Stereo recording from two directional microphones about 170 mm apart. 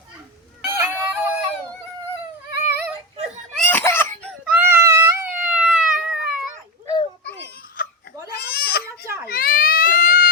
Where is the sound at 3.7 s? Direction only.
10° left (ahead or behind).